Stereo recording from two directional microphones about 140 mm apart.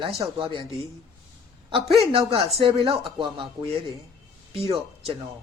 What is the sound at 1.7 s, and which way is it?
Speech, 40° right (ahead or behind).